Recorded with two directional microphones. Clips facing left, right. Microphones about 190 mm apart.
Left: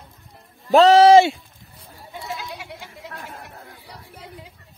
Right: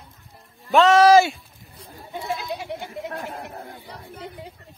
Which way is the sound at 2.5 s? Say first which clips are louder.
Right 7 dB; 25° right (ahead or behind).